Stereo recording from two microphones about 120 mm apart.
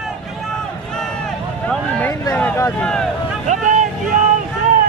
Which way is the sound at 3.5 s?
90° right.